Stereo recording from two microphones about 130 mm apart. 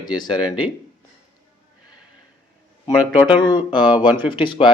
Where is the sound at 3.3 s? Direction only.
35° left (ahead or behind).